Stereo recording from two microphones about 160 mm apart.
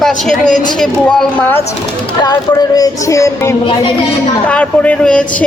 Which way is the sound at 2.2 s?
25° left (ahead or behind).